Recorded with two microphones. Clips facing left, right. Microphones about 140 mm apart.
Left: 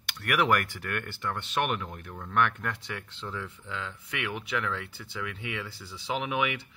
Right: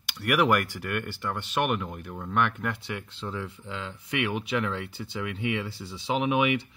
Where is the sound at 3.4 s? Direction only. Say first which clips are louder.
Right 1 dB; 20° right (ahead or behind).